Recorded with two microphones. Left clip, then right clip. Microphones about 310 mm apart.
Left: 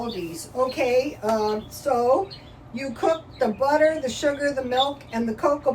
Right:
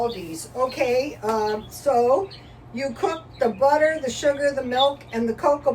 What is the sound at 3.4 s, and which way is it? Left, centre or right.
Speech, centre.